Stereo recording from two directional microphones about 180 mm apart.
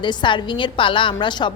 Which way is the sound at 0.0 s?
25° left (ahead or behind).